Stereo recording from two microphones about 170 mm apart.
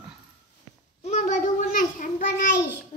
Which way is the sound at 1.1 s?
45° left (ahead or behind).